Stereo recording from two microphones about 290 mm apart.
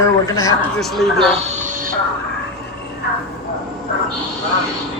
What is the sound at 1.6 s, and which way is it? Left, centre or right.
Music, right.